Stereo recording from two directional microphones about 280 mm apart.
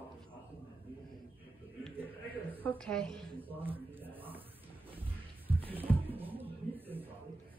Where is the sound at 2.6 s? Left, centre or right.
Centre.